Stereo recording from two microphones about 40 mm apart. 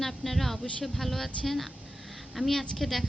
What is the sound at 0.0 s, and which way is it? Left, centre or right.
A woman's voice, centre.